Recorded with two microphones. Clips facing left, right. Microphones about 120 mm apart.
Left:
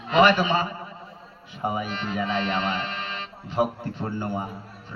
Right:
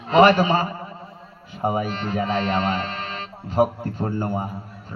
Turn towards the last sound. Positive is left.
turn(degrees=-40)  # may be behind; listen again after turning